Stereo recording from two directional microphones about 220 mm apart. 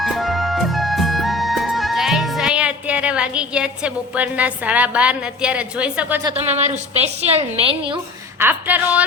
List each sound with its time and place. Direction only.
0.0 s music: centre (ahead or behind)
6.2 s a woman's voice: 30° right (ahead or behind)
8.4 s a woman's voice: 10° right (ahead or behind)